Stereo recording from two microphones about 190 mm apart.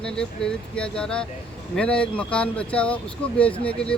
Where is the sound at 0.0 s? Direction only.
5° left (ahead or behind).